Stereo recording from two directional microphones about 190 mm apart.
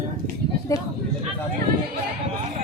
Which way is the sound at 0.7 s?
15° left (ahead or behind).